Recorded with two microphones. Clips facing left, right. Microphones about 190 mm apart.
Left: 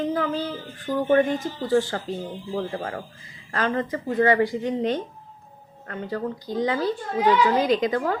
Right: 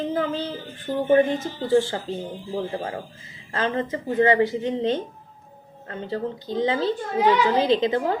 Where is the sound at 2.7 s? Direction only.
25° right (ahead or behind).